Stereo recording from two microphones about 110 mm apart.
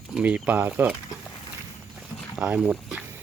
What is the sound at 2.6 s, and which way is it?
Speech, 10° right (ahead or behind).